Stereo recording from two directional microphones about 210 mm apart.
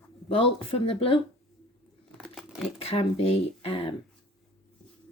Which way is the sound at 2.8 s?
30° left (ahead or behind).